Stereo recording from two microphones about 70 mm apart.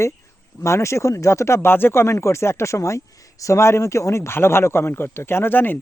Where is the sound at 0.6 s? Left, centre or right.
Left.